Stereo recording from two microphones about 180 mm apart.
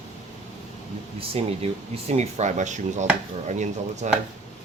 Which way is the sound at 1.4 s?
35° right (ahead or behind).